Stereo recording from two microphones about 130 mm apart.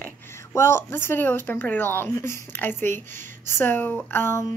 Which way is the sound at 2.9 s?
70° right (ahead or behind).